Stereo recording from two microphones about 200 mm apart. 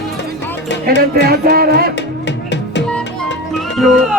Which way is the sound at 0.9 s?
50° right (ahead or behind).